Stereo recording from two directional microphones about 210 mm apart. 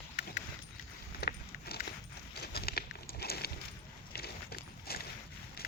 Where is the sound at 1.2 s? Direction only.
50° left (ahead or behind).